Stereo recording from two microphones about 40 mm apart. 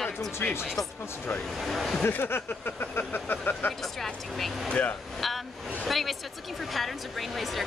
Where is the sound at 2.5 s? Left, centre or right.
Left.